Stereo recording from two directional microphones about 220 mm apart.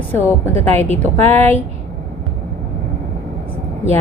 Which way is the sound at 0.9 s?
30° right (ahead or behind).